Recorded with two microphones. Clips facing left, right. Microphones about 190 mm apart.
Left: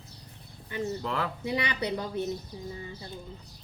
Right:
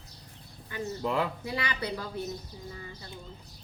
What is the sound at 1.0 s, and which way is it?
Speech, 15° right (ahead or behind).